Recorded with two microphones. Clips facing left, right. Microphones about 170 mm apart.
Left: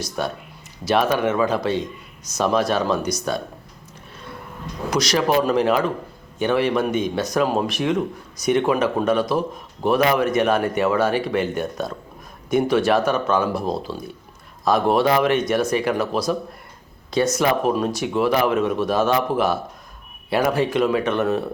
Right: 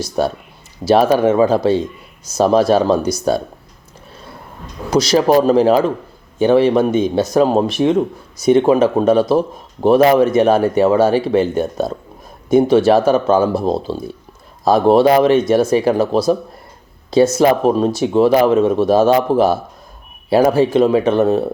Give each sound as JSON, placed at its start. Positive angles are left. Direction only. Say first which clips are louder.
{"t": 0.2, "sound": "speech", "louder": "right 9 dB", "side_deg": -35}
{"t": 4.9, "sound": "speech", "louder": "right 7 dB", "side_deg": -30}